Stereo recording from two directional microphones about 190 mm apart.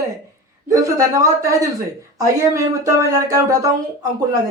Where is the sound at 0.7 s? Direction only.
15° right (ahead or behind).